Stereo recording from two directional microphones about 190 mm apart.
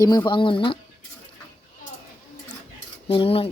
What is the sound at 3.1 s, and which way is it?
Speech, 30° left (ahead or behind).